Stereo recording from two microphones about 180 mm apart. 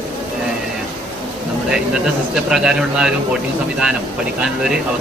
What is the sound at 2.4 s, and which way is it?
Speech, 5° right (ahead or behind).